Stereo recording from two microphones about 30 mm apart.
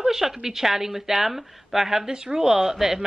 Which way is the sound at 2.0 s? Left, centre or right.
Right.